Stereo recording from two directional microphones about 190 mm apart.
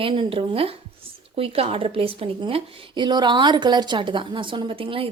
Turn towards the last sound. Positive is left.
turn(degrees=-30)  # may be behind; listen again after turning